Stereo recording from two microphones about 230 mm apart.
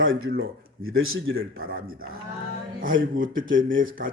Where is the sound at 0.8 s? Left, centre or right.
Right.